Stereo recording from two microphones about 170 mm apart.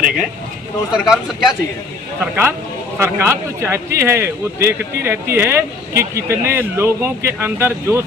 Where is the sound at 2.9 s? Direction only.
15° right (ahead or behind).